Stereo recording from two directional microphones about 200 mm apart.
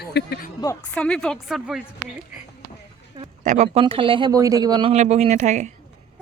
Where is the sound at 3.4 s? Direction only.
35° right (ahead or behind).